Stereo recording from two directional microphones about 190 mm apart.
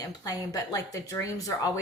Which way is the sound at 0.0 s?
20° left (ahead or behind).